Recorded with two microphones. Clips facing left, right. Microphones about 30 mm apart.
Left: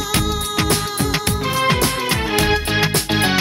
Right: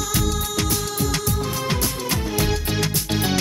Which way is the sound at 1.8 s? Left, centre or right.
Left.